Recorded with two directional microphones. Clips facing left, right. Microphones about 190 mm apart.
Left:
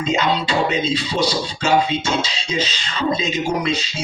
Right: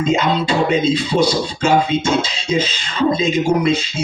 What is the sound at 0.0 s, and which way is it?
Speech, 50° right (ahead or behind).